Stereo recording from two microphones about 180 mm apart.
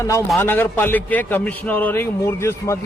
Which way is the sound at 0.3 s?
10° left (ahead or behind).